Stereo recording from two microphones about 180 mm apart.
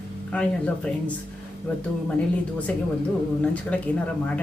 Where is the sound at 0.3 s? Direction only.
10° left (ahead or behind).